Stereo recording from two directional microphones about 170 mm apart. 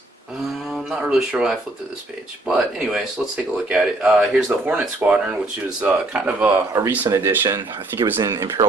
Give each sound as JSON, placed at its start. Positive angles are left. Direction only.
{"t": 0.7, "sound": "speech", "side_deg": -5}